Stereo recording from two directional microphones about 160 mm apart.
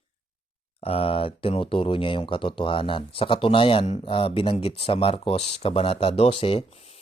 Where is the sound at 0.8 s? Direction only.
35° left (ahead or behind).